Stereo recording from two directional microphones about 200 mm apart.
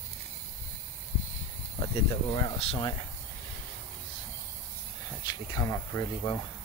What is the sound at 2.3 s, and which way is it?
Speech, 25° left (ahead or behind).